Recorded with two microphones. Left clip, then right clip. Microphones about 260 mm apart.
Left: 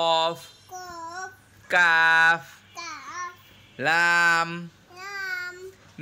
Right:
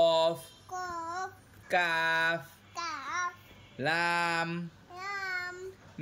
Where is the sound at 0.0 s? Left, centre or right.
Centre.